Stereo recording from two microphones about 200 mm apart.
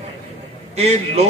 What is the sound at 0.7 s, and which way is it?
Speech, 30° right (ahead or behind).